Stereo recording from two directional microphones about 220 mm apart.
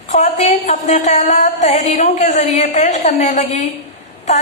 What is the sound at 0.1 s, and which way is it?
A woman's voice, 30° left (ahead or behind).